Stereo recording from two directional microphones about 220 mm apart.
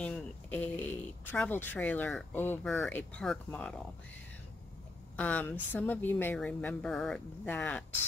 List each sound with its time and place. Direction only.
0.0 s speech: 5° left (ahead or behind)
5.1 s a woman's voice: 5° left (ahead or behind)